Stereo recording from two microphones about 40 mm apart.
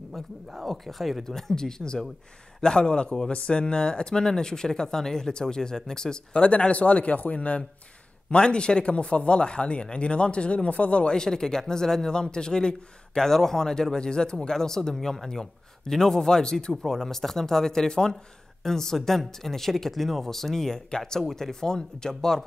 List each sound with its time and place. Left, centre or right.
0.7 s speech: centre
1.2 s speech: centre
6.4 s a man's voice: left
8.3 s speech: left
11.1 s speech: centre